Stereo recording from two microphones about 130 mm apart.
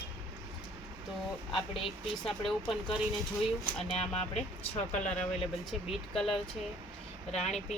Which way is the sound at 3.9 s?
55° left (ahead or behind).